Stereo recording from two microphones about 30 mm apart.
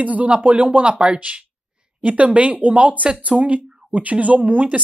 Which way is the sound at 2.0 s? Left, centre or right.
Right.